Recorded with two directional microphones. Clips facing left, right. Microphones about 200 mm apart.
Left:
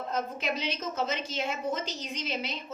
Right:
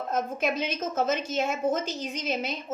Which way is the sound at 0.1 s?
50° right (ahead or behind).